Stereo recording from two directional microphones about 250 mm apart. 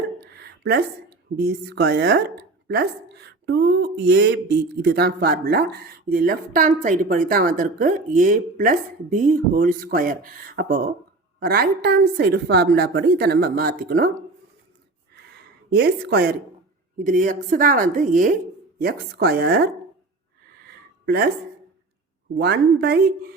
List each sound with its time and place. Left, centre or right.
0.2 s a sound: right
1.4 s a woman's voice: right
15.7 s a woman's voice: right
22.4 s a woman's voice: right